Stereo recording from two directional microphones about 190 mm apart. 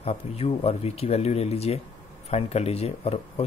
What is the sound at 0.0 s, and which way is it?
Speech, 30° left (ahead or behind).